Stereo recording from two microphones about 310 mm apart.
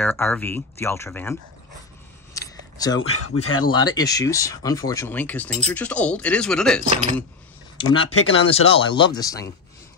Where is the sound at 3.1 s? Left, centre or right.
Left.